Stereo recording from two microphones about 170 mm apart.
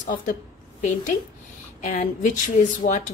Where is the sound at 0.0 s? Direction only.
50° left (ahead or behind).